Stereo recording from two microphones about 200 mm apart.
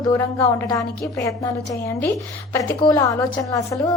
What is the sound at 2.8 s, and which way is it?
Speech, 20° left (ahead or behind).